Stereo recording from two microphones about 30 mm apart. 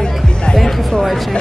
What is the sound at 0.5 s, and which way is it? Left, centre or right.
Speech, centre.